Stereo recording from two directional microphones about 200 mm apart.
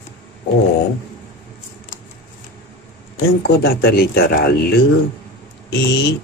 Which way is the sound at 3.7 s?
50° left (ahead or behind).